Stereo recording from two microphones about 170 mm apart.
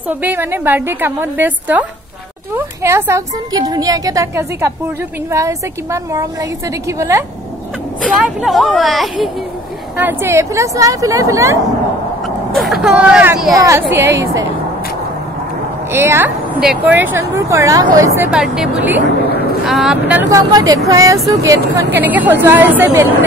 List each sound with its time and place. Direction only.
0.2 s a woman's voice: 10° right (ahead or behind)
8.2 s speech: centre (ahead or behind)
9.9 s speech: 10° right (ahead or behind)
12.5 s speech: centre (ahead or behind); by 14.4 s 15° right (ahead or behind)
15.9 s speech: 15° right (ahead or behind)